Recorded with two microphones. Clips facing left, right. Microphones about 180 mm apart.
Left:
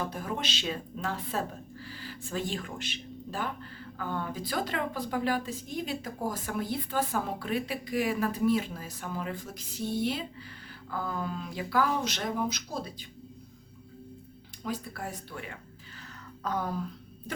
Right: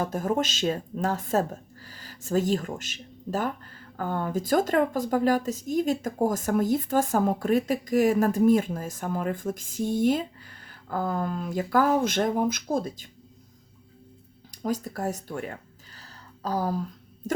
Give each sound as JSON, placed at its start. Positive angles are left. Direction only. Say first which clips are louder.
{"t": 0.0, "sound": "a woman's voice", "louder": "right 8 dB", "side_deg": -45}
{"t": 14.5, "sound": "a woman's voice", "louder": "right 7 dB", "side_deg": -40}
{"t": 16.0, "sound": "a sound", "louder": "right 1 dB", "side_deg": -35}